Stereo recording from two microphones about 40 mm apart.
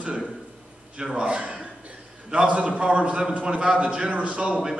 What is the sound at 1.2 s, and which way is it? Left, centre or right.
A man's voice, right.